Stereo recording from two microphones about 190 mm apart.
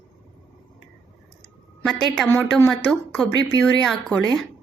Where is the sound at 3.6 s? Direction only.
Centre (ahead or behind).